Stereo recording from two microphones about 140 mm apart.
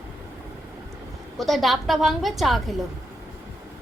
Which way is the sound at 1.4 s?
Centre (ahead or behind).